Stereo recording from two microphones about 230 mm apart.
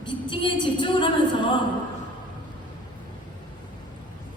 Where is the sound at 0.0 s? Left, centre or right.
Left.